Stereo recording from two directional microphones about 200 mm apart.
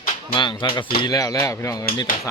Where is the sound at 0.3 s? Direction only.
20° left (ahead or behind).